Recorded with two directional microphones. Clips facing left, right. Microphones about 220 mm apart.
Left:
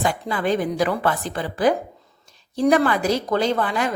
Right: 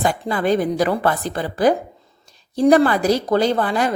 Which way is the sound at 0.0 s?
40° right (ahead or behind).